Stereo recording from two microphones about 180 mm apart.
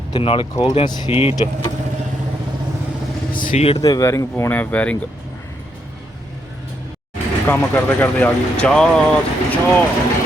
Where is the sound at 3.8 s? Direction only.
20° left (ahead or behind).